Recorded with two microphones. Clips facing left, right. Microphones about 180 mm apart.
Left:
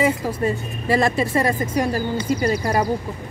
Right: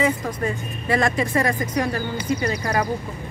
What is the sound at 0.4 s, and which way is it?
Speech, 30° left (ahead or behind).